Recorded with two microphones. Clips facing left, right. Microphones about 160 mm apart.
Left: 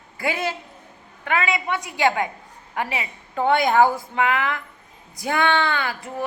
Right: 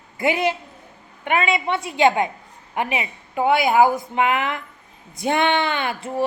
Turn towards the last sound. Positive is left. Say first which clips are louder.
# right 4 dB
turn(degrees=-25)  # may be behind; listen again after turning